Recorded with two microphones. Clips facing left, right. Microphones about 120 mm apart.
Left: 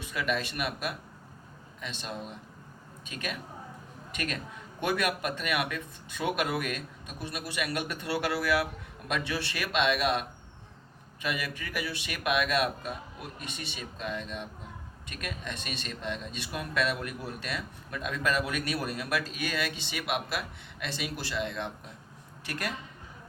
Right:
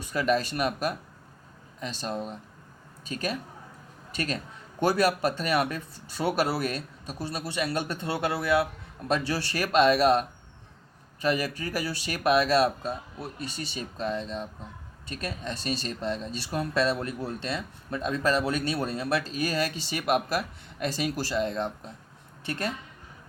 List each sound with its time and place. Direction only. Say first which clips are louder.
0.0 s speech: right 6 dB; 40° right (ahead or behind)
9.0 s speech: right 5 dB; 35° right (ahead or behind)
22.4 s a woman's voice: right 4 dB; 25° right (ahead or behind)